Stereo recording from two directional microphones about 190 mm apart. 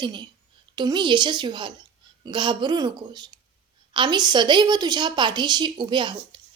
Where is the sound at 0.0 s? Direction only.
25° right (ahead or behind).